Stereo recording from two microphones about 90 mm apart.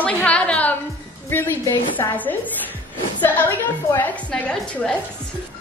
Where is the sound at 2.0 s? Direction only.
35° left (ahead or behind).